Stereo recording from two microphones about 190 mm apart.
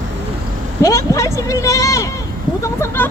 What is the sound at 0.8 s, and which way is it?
Speech, 15° left (ahead or behind).